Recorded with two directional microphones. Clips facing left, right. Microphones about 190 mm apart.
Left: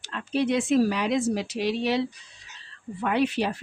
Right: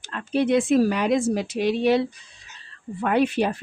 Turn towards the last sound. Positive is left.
turn(degrees=-50)  # may be behind; listen again after turning